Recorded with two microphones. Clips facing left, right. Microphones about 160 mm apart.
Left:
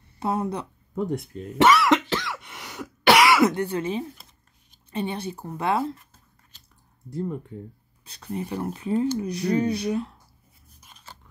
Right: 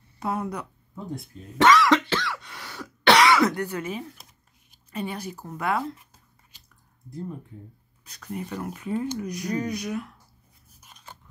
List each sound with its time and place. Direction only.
0.2 s speech: 25° left (ahead or behind)
0.9 s speech: 75° left (ahead or behind)
1.9 s cough: 20° left (ahead or behind)
3.0 s cough: 5° left (ahead or behind)
3.4 s speech: 25° left (ahead or behind)
7.1 s speech: 75° left (ahead or behind)
8.0 s speech: 30° left (ahead or behind)
10.7 s a sound: 10° right (ahead or behind)